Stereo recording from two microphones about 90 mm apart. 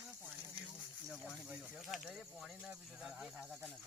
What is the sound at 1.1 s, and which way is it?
Speech, 5° right (ahead or behind).